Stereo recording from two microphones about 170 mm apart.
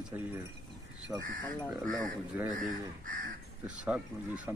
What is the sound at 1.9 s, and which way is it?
Speech, 55° right (ahead or behind).